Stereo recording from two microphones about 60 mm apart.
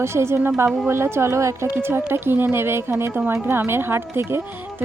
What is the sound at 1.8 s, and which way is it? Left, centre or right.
Speech, right.